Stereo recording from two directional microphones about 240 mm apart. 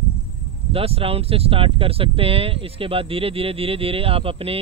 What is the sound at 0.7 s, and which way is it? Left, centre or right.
Speech, right.